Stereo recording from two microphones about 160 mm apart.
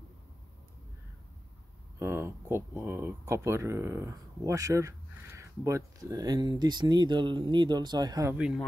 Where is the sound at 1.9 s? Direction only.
15° right (ahead or behind).